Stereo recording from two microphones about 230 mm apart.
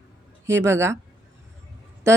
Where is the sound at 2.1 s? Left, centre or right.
Centre.